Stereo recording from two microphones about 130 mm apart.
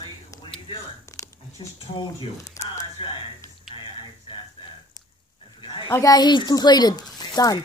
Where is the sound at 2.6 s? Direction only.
20° left (ahead or behind).